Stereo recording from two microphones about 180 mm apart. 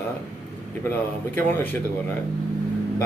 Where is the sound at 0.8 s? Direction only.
10° left (ahead or behind).